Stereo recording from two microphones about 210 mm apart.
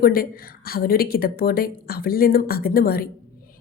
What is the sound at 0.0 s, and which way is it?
A woman's voice, 45° left (ahead or behind).